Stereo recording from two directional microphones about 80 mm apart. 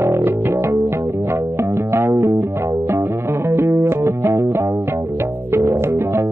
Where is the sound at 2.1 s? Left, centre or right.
Right.